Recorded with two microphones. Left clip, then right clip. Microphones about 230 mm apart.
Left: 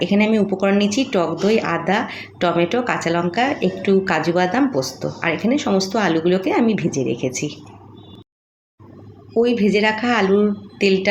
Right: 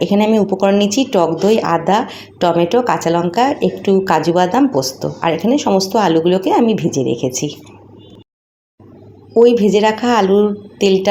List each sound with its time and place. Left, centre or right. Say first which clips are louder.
0.0 s speech: right 4 dB; centre
9.3 s speech: right 7 dB; centre